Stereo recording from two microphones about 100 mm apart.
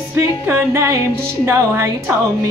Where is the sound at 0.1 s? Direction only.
30° right (ahead or behind).